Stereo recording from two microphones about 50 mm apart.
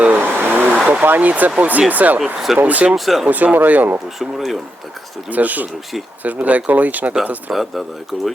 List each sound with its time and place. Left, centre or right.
0.0 s vehicle: right
1.0 s speech: right
2.1 s speech: centre
2.6 s speech: right
2.9 s speech: centre
3.2 s speech: right
4.2 s speech: centre
5.3 s speech: right
7.5 s speech: centre